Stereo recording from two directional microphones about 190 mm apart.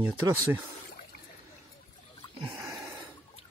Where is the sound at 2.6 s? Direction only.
20° right (ahead or behind).